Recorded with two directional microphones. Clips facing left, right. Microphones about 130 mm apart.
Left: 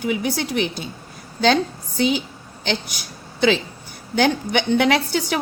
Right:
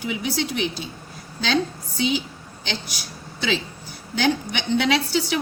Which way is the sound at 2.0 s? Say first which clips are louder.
Left 3 dB; 50° left (ahead or behind).